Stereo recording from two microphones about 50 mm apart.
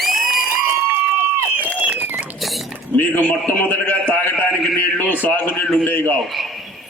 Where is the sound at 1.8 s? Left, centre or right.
Right.